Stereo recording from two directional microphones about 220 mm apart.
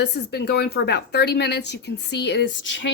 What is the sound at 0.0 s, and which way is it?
A woman's voice, 50° left (ahead or behind).